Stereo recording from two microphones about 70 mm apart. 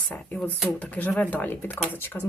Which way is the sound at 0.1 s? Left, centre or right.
Left.